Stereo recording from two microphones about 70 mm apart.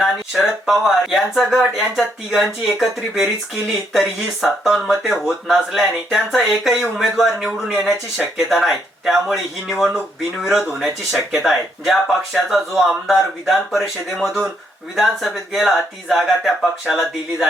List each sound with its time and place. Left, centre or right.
0.0 s speech: centre